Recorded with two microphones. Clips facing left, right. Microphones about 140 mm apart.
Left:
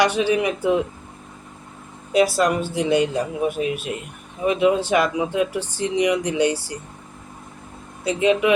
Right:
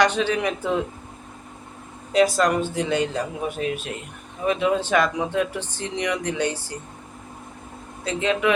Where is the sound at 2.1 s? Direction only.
10° left (ahead or behind).